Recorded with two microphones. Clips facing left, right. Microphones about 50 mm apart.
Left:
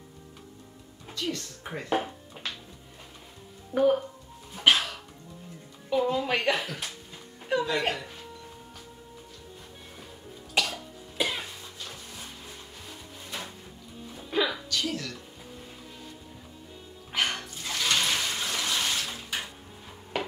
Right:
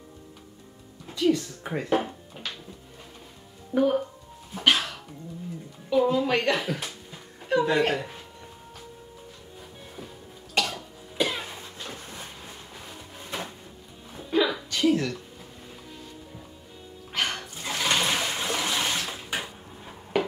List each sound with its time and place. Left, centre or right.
1.1 s a woman's voice: centre
2.0 s music: centre
3.7 s speech: centre
4.6 s music: centre
5.9 s speech: centre
7.5 s chuckle: centre
10.5 s cough: centre
11.5 s a sound: right
12.9 s music: right
14.3 s music: centre
14.7 s a sound: right
17.1 s music: centre
17.6 s toilet flush: right
20.1 s a sound: centre